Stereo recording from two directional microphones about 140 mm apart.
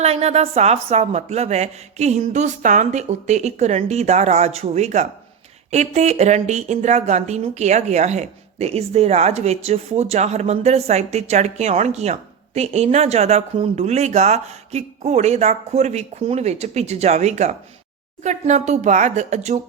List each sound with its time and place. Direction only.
0.0 s speech: 50° right (ahead or behind)